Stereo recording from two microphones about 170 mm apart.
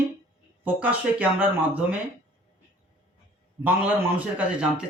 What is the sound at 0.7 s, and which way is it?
Speech, 10° right (ahead or behind).